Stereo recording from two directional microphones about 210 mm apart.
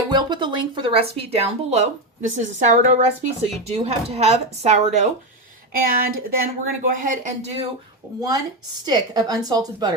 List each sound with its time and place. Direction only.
0.1 s speech: 20° right (ahead or behind)
5.7 s speech: 45° right (ahead or behind)
8.0 s a woman's voice: 15° right (ahead or behind)